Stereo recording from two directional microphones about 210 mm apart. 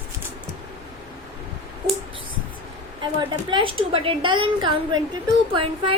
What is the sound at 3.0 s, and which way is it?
A woman's voice, 20° right (ahead or behind).